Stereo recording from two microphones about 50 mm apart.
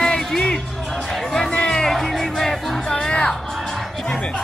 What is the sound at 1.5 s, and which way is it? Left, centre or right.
Music, centre.